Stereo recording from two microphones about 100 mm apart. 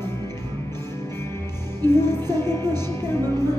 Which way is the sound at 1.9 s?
25° left (ahead or behind).